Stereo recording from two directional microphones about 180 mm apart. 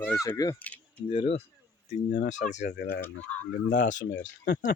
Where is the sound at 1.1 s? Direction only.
35° left (ahead or behind).